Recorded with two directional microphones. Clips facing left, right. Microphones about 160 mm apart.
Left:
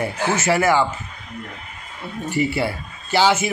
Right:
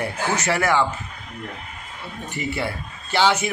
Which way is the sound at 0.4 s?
5° left (ahead or behind).